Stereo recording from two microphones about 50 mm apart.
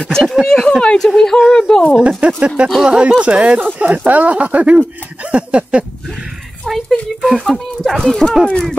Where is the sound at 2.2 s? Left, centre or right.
Right.